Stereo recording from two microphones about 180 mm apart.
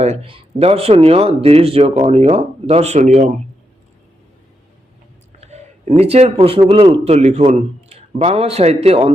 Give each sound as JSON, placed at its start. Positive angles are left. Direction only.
{"t": 0.0, "sound": "speech", "side_deg": -35}
{"t": 5.4, "sound": "a man's voice", "side_deg": -35}